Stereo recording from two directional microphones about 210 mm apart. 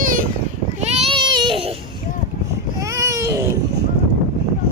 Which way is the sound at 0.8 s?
30° right (ahead or behind).